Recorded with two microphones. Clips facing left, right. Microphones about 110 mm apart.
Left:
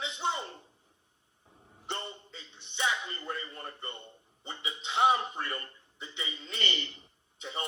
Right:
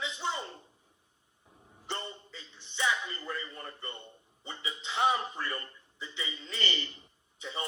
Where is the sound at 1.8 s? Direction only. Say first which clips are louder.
Even; 20° left (ahead or behind).